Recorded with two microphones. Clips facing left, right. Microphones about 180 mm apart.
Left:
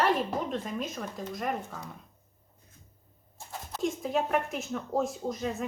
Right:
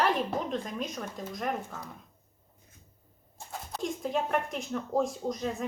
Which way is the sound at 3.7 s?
Centre (ahead or behind).